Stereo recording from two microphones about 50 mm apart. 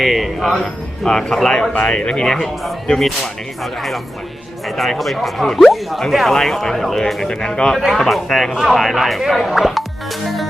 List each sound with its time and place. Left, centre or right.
0.0 s speech: centre
0.6 s a man's voice: centre
2.2 s a man's voice: centre
7.8 s speech: centre